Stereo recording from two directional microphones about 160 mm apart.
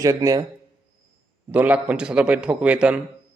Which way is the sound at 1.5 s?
10° right (ahead or behind).